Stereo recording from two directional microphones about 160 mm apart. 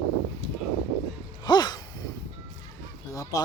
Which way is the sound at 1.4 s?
25° left (ahead or behind).